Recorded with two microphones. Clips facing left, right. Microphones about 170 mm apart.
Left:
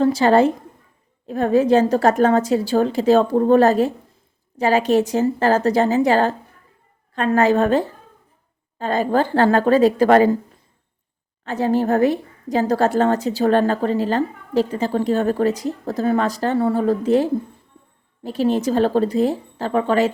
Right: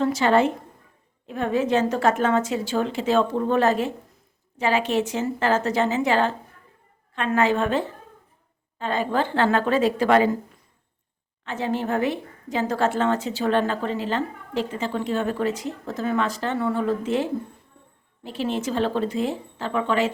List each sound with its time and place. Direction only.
0.0 s a woman's voice: 35° left (ahead or behind)
11.4 s a woman's voice: 40° left (ahead or behind)